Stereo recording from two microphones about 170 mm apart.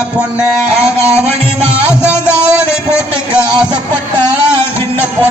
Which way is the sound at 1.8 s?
5° right (ahead or behind).